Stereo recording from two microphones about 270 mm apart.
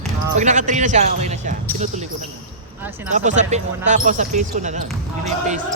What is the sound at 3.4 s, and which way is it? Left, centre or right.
Speech, right.